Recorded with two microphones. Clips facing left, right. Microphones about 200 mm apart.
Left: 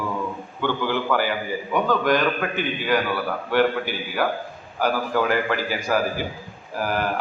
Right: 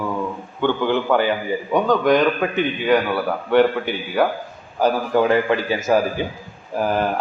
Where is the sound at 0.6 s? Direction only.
20° right (ahead or behind).